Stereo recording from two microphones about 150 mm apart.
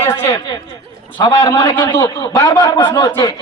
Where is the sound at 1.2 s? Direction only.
30° left (ahead or behind).